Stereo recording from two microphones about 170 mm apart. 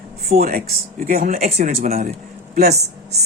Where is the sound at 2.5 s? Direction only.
65° right (ahead or behind).